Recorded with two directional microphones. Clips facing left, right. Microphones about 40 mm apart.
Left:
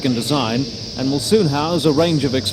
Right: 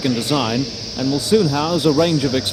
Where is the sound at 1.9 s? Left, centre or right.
Right.